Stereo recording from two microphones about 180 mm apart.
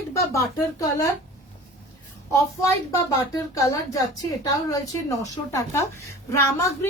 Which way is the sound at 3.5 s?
20° left (ahead or behind).